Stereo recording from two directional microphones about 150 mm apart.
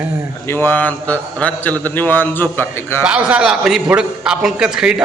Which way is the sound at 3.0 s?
5° right (ahead or behind).